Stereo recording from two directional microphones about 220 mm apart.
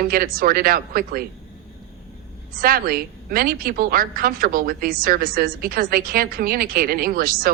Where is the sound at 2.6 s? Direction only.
40° right (ahead or behind).